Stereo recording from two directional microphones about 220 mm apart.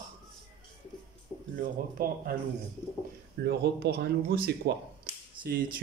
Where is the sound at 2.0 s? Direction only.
40° right (ahead or behind).